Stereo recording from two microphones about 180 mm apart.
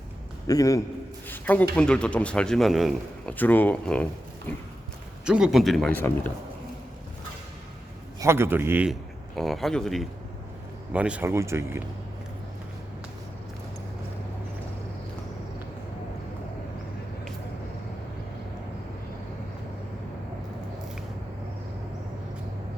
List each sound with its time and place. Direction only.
0.4 s a man's voice: 20° left (ahead or behind)
1.3 s a sound: 10° left (ahead or behind)
1.7 s a man's voice: 5° left (ahead or behind)
3.3 s speech: 10° left (ahead or behind)
5.2 s a man's voice: 5° right (ahead or behind)
8.2 s a man's voice: 15° right (ahead or behind)